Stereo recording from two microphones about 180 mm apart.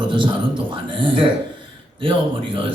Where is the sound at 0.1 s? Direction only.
25° right (ahead or behind).